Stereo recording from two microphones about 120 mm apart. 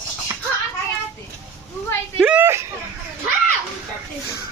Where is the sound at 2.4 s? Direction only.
20° right (ahead or behind).